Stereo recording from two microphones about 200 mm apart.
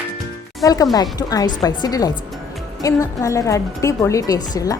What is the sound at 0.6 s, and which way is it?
A woman's voice, 20° left (ahead or behind).